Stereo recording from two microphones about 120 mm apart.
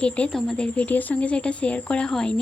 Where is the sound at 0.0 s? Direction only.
5° left (ahead or behind).